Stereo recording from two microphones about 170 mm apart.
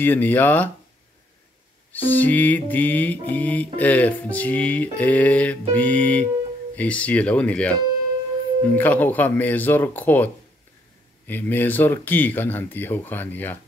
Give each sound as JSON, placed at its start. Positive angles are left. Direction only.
{"t": 0.0, "sound": "music", "side_deg": 10}
{"t": 1.9, "sound": "music", "side_deg": 10}